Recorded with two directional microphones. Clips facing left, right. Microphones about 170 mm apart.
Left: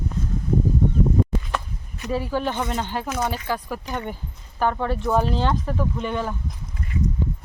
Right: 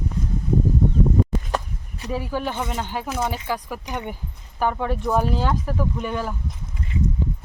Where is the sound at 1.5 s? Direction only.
40° right (ahead or behind).